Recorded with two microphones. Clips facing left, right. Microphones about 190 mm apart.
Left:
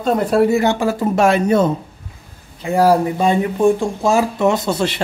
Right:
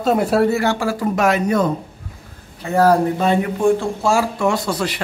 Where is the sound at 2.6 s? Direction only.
10° left (ahead or behind).